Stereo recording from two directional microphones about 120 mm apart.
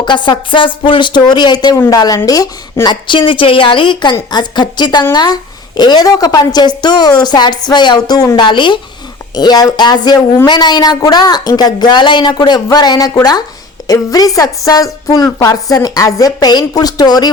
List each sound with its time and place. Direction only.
0.0 s a woman's voice: 40° left (ahead or behind)